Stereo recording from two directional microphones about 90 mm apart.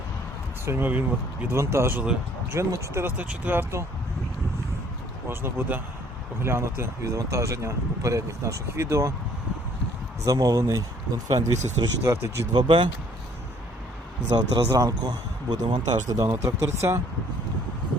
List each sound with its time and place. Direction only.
0.6 s speech: 25° right (ahead or behind)
1.5 s speech: 30° right (ahead or behind)
3.2 s speech: 20° right (ahead or behind)
5.3 s speech: 25° right (ahead or behind)
10.2 s speech: 45° right (ahead or behind)
12.5 s speech: 65° right (ahead or behind)
14.3 s speech: 45° right (ahead or behind)